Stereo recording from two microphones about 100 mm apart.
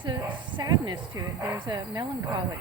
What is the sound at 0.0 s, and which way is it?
Bow-wow, 50° right (ahead or behind).